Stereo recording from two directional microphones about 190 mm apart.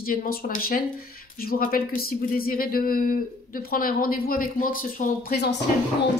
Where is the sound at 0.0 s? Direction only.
50° left (ahead or behind).